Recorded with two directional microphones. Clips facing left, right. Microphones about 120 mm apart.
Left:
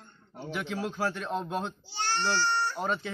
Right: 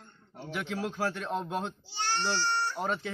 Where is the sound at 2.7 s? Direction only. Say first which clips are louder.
Left 1 dB; 5° right (ahead or behind).